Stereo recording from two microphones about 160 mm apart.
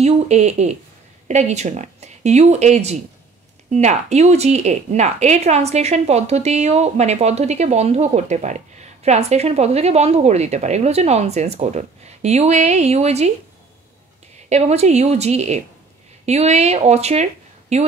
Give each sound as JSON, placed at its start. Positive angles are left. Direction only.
{"t": 0.0, "sound": "speech", "side_deg": -45}
{"t": 14.5, "sound": "speech", "side_deg": -45}